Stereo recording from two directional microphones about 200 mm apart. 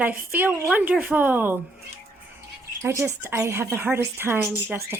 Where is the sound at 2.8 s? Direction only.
15° right (ahead or behind).